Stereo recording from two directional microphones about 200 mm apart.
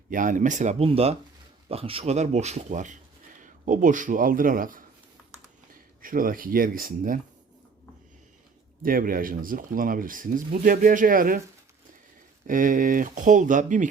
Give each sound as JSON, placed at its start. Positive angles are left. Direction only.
{"t": 0.1, "sound": "a man's voice", "side_deg": -40}
{"t": 6.0, "sound": "speech", "side_deg": -45}
{"t": 8.8, "sound": "speech", "side_deg": -45}
{"t": 12.5, "sound": "speech", "side_deg": -40}